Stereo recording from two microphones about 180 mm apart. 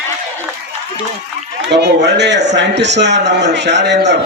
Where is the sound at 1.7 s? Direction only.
70° right (ahead or behind).